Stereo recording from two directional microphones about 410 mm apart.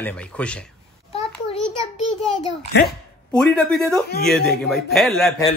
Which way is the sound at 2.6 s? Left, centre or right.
Left.